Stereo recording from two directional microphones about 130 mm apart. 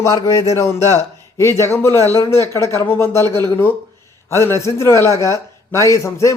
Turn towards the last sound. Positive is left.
turn(degrees=25)  # may be behind; listen again after turning